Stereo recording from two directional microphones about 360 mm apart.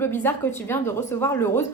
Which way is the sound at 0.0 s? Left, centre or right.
Centre.